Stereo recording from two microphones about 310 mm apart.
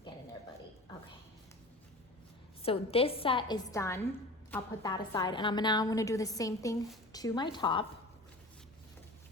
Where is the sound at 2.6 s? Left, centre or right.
Centre.